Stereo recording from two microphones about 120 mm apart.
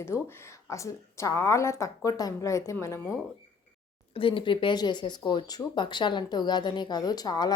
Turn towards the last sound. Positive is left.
turn(degrees=35)  # may be behind; listen again after turning